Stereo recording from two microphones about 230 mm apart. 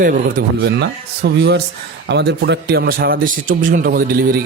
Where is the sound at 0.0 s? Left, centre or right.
Right.